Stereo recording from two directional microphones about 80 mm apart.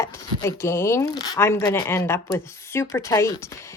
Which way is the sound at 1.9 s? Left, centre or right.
Left.